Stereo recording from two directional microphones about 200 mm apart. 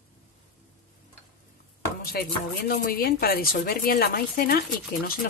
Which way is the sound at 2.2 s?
55° left (ahead or behind).